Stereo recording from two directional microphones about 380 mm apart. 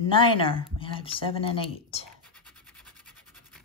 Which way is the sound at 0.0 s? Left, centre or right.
Centre.